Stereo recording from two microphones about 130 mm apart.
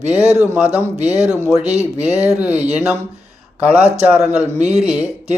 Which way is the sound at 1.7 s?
55° right (ahead or behind).